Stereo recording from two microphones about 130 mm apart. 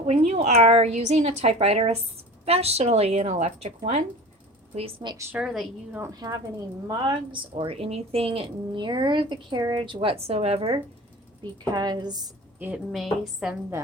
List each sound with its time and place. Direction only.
0.0 s a woman's voice: 55° right (ahead or behind)
5.3 s a woman's voice: 5° right (ahead or behind)
5.9 s a woman's voice: 20° right (ahead or behind)
6.8 s a woman's voice: 35° right (ahead or behind)
11.7 s a woman's voice: 35° right (ahead or behind)
12.5 s a woman's voice: 10° right (ahead or behind)